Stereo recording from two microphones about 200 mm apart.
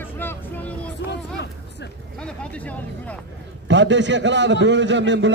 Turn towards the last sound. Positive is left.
turn(degrees=-60)  # may be behind; listen again after turning